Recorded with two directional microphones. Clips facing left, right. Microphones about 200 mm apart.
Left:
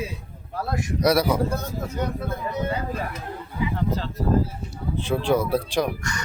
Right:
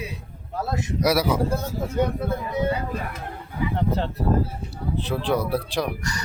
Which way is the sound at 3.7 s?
60° right (ahead or behind).